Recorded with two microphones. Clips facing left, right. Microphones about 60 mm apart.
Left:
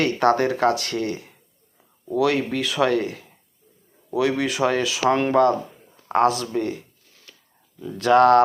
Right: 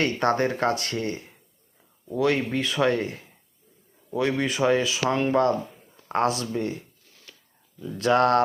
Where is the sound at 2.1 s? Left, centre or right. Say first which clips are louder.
Left 2 dB; left.